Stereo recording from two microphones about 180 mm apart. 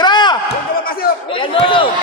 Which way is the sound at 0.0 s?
25° left (ahead or behind).